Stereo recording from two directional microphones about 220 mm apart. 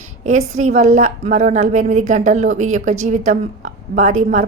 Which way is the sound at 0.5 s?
35° right (ahead or behind).